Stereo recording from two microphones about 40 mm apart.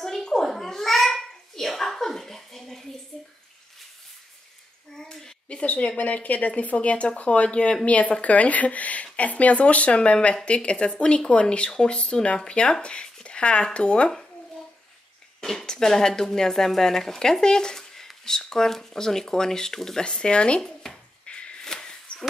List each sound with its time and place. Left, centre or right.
0.0 s babbling: centre
4.9 s a sound: centre
5.5 s speech: left
15.6 s speech: centre
20.1 s speech: left
21.3 s a sound: left